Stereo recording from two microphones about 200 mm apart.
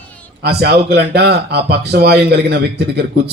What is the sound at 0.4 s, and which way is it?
Speech, 55° right (ahead or behind).